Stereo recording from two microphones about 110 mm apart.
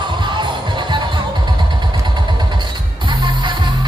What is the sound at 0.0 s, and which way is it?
Music, 45° right (ahead or behind).